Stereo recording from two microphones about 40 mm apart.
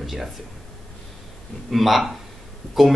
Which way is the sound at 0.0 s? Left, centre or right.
Centre.